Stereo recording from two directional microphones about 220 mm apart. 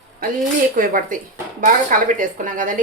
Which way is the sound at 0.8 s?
40° right (ahead or behind).